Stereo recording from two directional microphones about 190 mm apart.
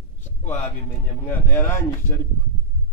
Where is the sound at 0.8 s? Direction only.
10° left (ahead or behind).